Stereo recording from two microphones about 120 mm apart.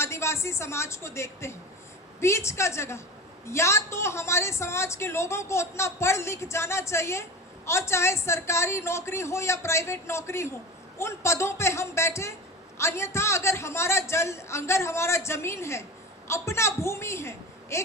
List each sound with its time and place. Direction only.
0.0 s a woman's voice: 20° left (ahead or behind)